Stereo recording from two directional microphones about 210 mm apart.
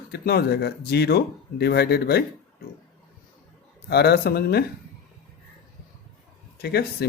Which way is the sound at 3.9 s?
50° left (ahead or behind).